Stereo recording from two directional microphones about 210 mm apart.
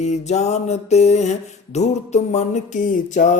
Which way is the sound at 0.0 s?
35° left (ahead or behind).